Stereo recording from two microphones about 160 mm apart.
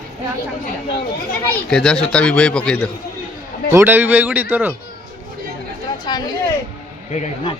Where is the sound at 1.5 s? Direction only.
5° left (ahead or behind).